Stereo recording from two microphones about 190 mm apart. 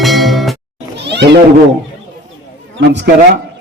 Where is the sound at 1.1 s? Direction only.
65° right (ahead or behind).